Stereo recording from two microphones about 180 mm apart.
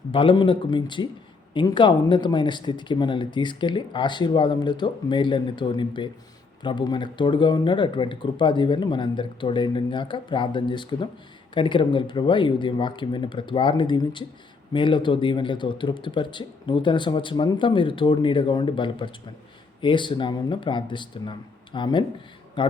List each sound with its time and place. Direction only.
0.1 s speech: 30° left (ahead or behind)